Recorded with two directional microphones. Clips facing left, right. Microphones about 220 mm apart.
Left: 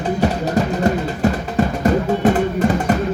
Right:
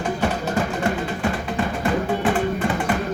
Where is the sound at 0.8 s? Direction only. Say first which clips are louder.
Left 5 dB; 40° left (ahead or behind).